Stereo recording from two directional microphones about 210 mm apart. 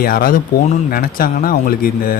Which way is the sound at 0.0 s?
45° left (ahead or behind).